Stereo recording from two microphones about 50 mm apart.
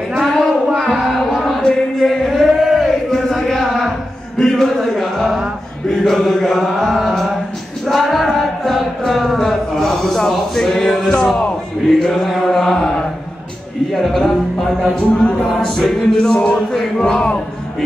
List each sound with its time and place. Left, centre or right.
0.2 s a sound: centre
0.7 s music: centre
2.0 s chant: centre
2.8 s a sound: centre
6.0 s chant: centre
7.8 s a sound: centre
11.1 s music: centre
11.9 s music: centre
12.7 s mantra: centre
13.9 s music: centre
15.0 s music: centre
15.5 s music: centre